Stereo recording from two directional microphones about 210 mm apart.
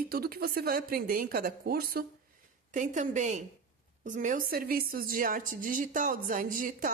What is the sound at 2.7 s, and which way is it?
A woman's voice, 35° right (ahead or behind).